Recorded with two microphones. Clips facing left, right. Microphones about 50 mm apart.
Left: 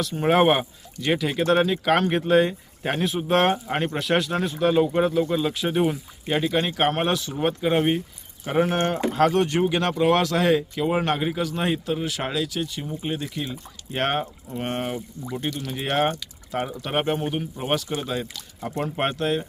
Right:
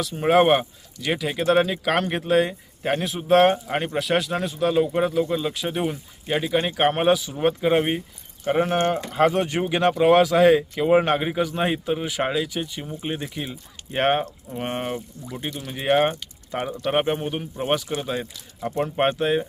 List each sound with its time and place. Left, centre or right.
0.0 s speech: centre
17.8 s speech: right
18.8 s speech: centre